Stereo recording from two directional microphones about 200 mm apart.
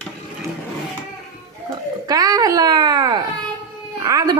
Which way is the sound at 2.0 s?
20° right (ahead or behind).